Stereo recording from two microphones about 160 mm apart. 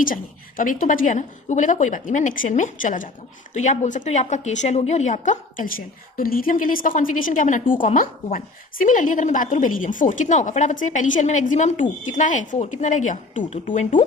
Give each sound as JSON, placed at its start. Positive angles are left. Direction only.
{"t": 0.0, "sound": "a woman's voice", "side_deg": 60}